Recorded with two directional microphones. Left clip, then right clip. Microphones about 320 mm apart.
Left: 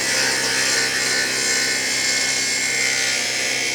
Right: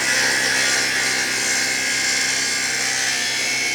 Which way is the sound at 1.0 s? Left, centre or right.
Right.